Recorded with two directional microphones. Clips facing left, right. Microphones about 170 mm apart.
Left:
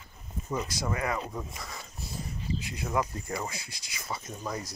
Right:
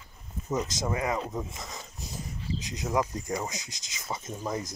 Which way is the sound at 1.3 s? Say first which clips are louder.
Right 3 dB; 20° right (ahead or behind).